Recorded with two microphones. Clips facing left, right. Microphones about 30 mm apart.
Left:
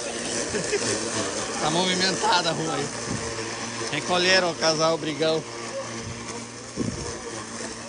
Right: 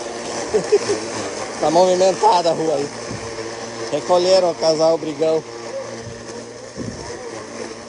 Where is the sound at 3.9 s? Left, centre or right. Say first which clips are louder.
Right 8 dB; left.